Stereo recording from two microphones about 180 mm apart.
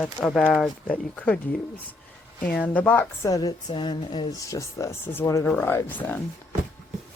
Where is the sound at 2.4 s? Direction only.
10° left (ahead or behind).